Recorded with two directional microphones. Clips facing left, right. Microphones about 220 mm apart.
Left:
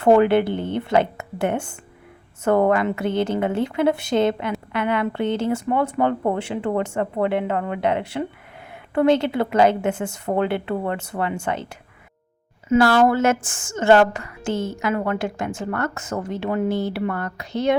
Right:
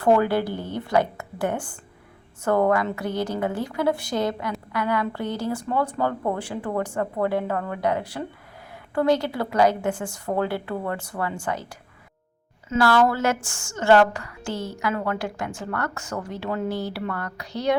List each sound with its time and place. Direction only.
0.0 s a woman's voice: 25° left (ahead or behind)
12.7 s a woman's voice: 25° left (ahead or behind)